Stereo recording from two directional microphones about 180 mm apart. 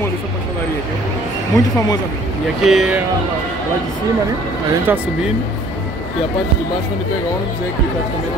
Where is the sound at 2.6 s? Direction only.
Centre (ahead or behind).